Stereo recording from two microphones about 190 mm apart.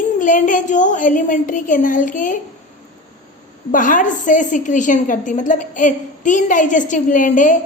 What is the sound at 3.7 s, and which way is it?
A woman's voice, 45° left (ahead or behind).